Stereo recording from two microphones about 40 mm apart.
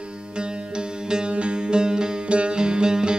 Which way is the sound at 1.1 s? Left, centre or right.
Right.